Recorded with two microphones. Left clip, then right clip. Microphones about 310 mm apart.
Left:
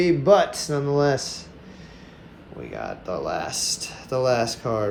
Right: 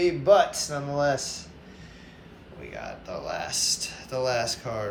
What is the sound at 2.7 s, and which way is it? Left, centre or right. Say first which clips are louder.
Speech: left 6 dB; centre.